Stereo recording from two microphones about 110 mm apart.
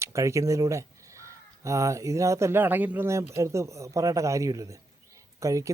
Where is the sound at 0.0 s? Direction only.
25° right (ahead or behind).